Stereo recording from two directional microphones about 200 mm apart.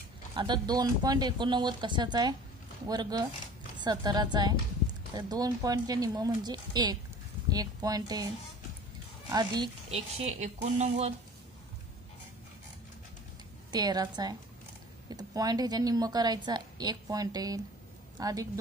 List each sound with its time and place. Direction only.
0.4 s a woman's voice: 20° right (ahead or behind)
9.3 s a woman's voice: 20° right (ahead or behind)
10.4 s speech: 35° right (ahead or behind)
13.7 s a woman's voice: 20° right (ahead or behind)